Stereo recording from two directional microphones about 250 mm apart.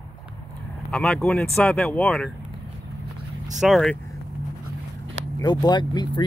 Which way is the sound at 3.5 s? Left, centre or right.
Centre.